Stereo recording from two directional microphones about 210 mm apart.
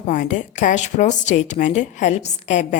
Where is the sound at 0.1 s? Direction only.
35° left (ahead or behind).